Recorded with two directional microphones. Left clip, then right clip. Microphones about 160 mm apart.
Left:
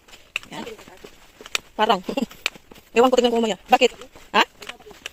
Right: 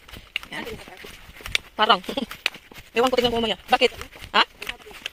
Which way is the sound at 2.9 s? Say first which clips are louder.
Left 4 dB; 55° left (ahead or behind).